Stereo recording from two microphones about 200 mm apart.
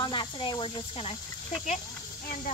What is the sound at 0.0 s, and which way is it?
Speech, 25° left (ahead or behind).